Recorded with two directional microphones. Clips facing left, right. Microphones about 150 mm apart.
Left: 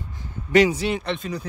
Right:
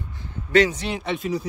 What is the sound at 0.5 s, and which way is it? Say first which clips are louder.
Speech: left 1 dB; 10° left (ahead or behind).